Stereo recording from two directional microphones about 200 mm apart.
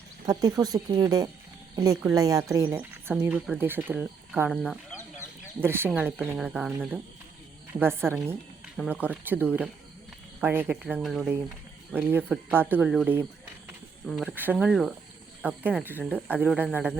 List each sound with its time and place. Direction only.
0.3 s speech: 20° right (ahead or behind)
14.3 s speech: 10° right (ahead or behind)